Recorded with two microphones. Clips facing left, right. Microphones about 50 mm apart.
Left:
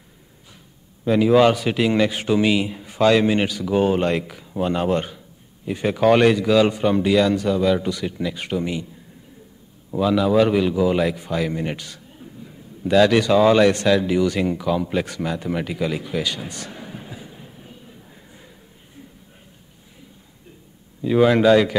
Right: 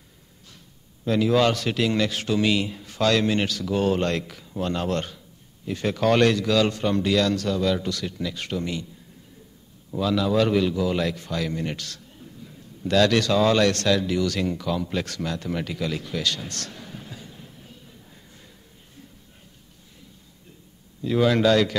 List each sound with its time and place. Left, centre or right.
1.0 s a man's voice: centre
9.9 s a man's voice: centre
21.0 s a man's voice: centre